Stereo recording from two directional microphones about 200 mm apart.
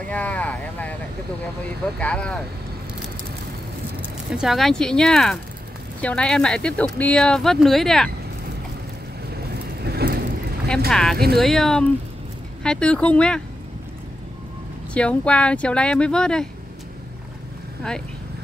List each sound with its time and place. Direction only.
0.1 s vehicle: 5° left (ahead or behind)
2.0 s speech: 5° left (ahead or behind)
4.3 s speech: centre (ahead or behind)
9.8 s vehicle: 50° right (ahead or behind)
10.9 s speech: centre (ahead or behind)
15.0 s speech: 5° left (ahead or behind)